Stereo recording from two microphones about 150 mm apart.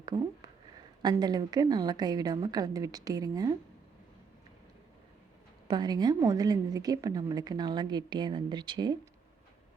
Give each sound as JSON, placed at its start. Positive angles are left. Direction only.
{"t": 1.1, "sound": "a woman's voice", "side_deg": -25}
{"t": 5.6, "sound": "a woman's voice", "side_deg": -30}